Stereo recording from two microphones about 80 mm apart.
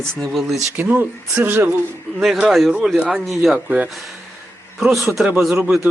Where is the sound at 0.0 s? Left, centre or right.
Centre.